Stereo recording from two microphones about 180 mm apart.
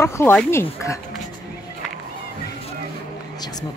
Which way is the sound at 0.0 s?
10° left (ahead or behind).